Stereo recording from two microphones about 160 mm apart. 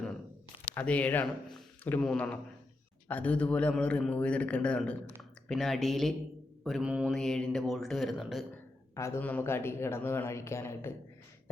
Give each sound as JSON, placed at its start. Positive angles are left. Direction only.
{"t": 0.7, "sound": "speech", "side_deg": 10}
{"t": 9.0, "sound": "speech", "side_deg": 15}